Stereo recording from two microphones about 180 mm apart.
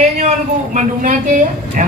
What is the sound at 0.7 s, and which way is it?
A woman's voice, 50° right (ahead or behind).